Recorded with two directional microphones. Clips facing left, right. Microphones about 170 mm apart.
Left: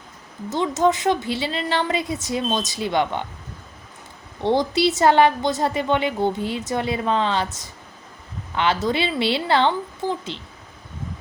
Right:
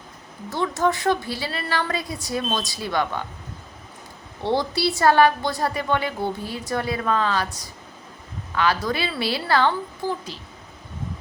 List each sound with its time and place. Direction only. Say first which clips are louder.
0.5 s a woman's voice: left 3 dB; 20° left (ahead or behind)
4.4 s a woman's voice: left 3 dB; 20° left (ahead or behind)